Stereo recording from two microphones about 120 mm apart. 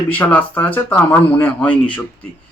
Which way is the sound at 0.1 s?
15° left (ahead or behind).